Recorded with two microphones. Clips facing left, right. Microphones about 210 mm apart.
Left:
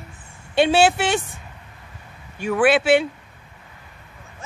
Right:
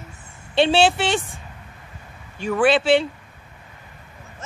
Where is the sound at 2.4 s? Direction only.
5° left (ahead or behind).